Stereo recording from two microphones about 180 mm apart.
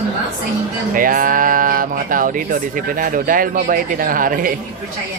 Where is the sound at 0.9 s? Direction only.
50° right (ahead or behind).